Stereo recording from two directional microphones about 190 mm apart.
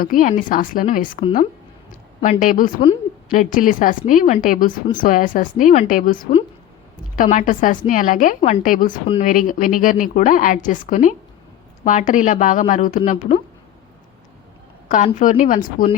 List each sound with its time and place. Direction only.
0.0 s a woman's voice: 45° left (ahead or behind)
2.4 s a woman's voice: 45° left (ahead or behind)
14.8 s a woman's voice: 40° left (ahead or behind)